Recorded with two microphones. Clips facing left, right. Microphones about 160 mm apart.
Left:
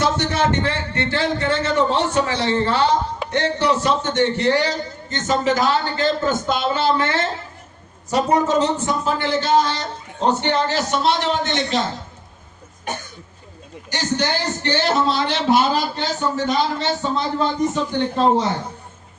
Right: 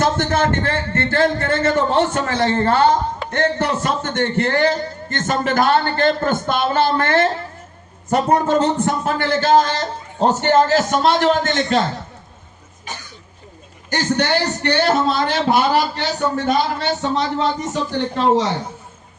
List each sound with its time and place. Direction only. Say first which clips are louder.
0.0 s a man's voice: right 2 dB; 50° right (ahead or behind)
13.9 s a man's voice: right 4 dB; 60° right (ahead or behind)
15.7 s a man's voice: right 3 dB; 65° right (ahead or behind)